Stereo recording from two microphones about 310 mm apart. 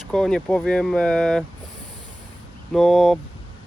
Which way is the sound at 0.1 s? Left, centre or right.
Centre.